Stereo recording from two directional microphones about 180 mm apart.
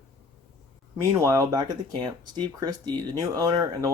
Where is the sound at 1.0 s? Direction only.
15° right (ahead or behind).